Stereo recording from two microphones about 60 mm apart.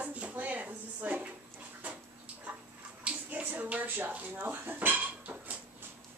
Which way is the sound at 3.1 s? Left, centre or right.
Right.